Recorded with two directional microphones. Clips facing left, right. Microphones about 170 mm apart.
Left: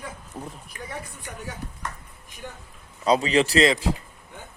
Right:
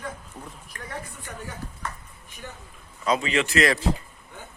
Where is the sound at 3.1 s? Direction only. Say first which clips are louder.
Left 4 dB; 35° left (ahead or behind).